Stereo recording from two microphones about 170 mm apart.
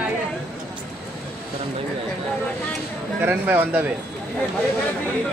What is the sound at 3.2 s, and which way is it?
Speech, 10° right (ahead or behind).